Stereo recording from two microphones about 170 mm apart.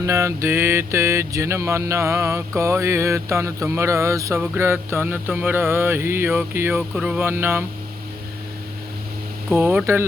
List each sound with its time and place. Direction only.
0.0 s mantra: 15° right (ahead or behind)
9.5 s mantra: 10° right (ahead or behind)